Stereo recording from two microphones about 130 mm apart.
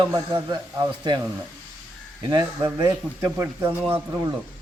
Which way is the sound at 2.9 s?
20° right (ahead or behind).